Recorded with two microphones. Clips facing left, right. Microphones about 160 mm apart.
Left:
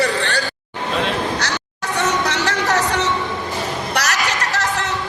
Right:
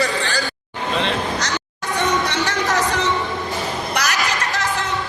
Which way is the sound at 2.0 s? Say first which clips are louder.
Even; 75° left (ahead or behind).